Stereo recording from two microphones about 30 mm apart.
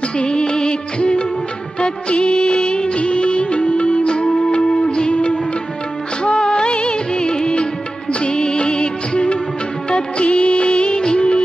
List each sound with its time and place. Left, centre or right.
0.2 s music of bollywood: left
5.1 s music: left
6.2 s music of bollywood: left
9.8 s music: left